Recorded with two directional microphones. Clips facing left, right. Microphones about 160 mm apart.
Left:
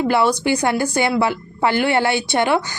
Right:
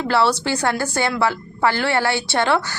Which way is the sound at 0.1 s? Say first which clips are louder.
Right 2 dB; 15° left (ahead or behind).